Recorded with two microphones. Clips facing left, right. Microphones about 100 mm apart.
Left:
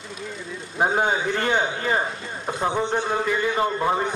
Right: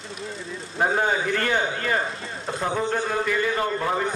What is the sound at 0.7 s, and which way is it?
A man's voice, 20° left (ahead or behind).